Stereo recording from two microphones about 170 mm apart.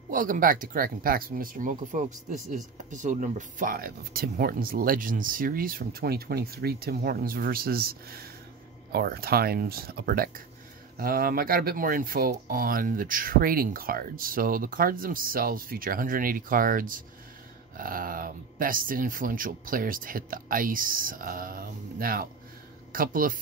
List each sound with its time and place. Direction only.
0.1 s speech: 55° right (ahead or behind)